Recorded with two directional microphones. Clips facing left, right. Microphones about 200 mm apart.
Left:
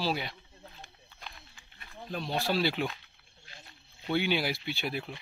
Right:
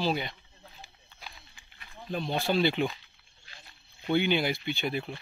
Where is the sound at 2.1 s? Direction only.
Centre (ahead or behind).